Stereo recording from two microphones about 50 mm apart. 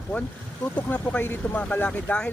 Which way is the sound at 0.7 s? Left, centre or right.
Left.